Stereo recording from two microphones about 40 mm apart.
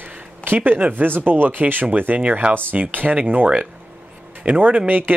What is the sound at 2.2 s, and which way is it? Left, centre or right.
Speech, right.